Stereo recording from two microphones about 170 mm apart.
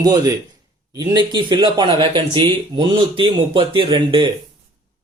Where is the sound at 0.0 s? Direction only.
20° right (ahead or behind).